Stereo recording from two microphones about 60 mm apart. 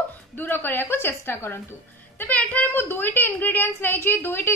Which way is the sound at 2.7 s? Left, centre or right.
Left.